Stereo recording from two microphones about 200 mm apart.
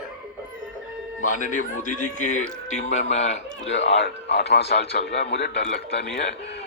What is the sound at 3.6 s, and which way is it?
A man's voice, 65° left (ahead or behind).